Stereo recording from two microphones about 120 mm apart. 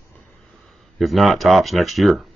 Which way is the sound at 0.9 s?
Centre (ahead or behind).